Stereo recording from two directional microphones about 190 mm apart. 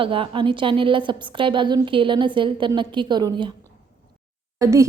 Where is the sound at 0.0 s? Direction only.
25° right (ahead or behind).